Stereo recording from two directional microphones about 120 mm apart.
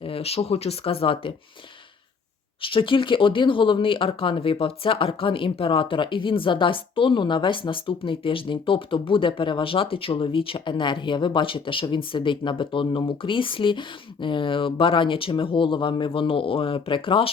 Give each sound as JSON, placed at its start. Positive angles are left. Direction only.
{"t": 0.0, "sound": "speech", "side_deg": 55}
{"t": 2.6, "sound": "speech", "side_deg": 45}